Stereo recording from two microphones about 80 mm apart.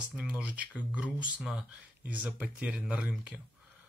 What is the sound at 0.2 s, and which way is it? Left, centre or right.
Speech, centre.